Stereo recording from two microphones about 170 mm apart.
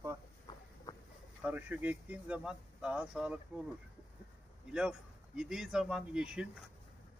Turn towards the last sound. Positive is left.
turn(degrees=-5)  # may be behind; listen again after turning